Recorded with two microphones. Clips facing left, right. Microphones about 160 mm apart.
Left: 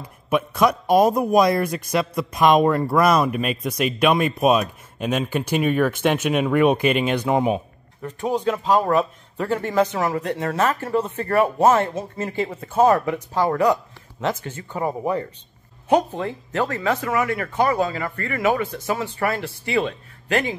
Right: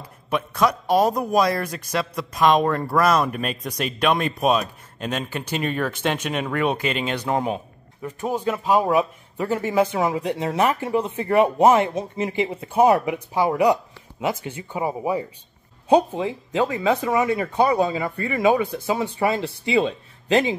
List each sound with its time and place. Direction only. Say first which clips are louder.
0.3 s a man's voice: left 2 dB; 15° left (ahead or behind)
8.0 s speech: left 2 dB; 5° right (ahead or behind)